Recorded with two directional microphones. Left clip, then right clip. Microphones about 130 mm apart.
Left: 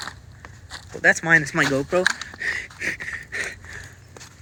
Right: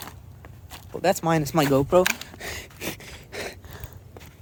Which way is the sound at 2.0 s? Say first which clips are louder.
Left 4 dB; 60° right (ahead or behind).